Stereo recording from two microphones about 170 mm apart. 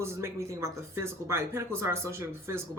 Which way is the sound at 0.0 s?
15° right (ahead or behind).